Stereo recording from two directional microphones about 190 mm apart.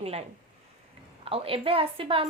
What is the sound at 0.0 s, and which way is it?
A woman's voice, 30° right (ahead or behind).